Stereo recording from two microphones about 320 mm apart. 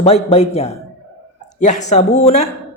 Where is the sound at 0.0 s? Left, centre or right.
Centre.